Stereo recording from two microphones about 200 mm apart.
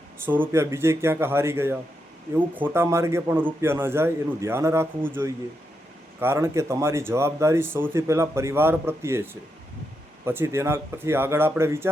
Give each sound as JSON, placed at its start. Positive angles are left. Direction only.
{"t": 0.5, "sound": "speech", "side_deg": -15}